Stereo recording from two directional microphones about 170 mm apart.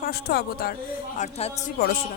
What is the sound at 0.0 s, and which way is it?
Speech, 70° left (ahead or behind).